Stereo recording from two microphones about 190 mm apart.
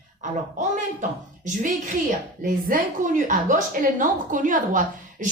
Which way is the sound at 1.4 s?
40° right (ahead or behind).